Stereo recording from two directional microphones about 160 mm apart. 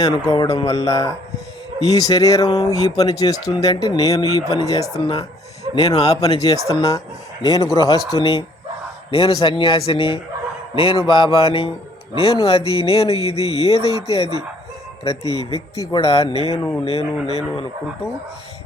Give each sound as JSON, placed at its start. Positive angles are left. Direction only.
{"t": 0.0, "sound": "speech", "side_deg": 25}
{"t": 9.0, "sound": "speech", "side_deg": 35}
{"t": 16.6, "sound": "speech", "side_deg": 15}
{"t": 16.8, "sound": "speech", "side_deg": 40}